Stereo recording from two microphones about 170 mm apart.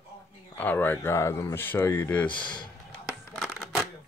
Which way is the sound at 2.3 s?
25° left (ahead or behind).